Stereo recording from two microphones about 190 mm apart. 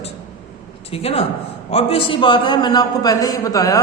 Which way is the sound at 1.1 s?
35° left (ahead or behind).